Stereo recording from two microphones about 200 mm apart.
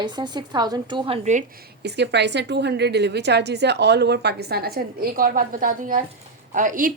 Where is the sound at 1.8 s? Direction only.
55° right (ahead or behind).